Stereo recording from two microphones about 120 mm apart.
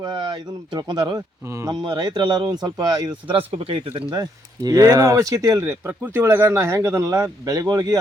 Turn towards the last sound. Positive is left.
turn(degrees=-30)  # may be behind; listen again after turning